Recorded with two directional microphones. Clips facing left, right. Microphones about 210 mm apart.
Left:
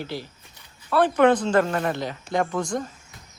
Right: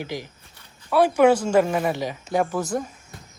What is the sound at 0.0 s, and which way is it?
Speech, 15° right (ahead or behind).